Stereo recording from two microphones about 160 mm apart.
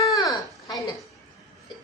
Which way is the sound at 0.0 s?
20° left (ahead or behind).